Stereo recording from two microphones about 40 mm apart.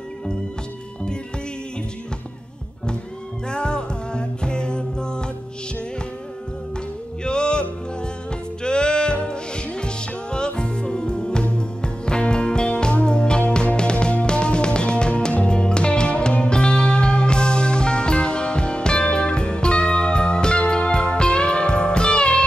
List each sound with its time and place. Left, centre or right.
3.4 s music: left
7.2 s music: left
8.6 s music: left